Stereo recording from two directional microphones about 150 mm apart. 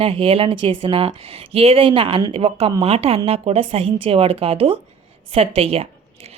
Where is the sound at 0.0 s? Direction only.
40° right (ahead or behind).